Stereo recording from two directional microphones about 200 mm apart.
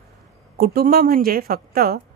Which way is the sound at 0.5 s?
50° right (ahead or behind).